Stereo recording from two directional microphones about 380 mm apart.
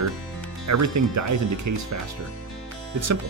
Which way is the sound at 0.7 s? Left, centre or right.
Right.